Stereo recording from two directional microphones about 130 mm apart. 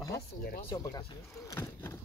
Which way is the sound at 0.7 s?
20° left (ahead or behind).